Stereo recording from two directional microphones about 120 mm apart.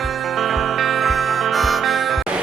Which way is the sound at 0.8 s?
Centre (ahead or behind).